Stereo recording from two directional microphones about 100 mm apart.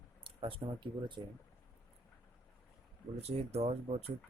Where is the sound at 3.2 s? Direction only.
90° right.